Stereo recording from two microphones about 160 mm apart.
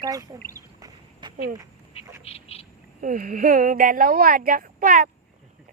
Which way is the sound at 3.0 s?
55° right (ahead or behind).